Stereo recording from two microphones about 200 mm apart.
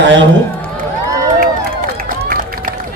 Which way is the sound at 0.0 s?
65° right (ahead or behind).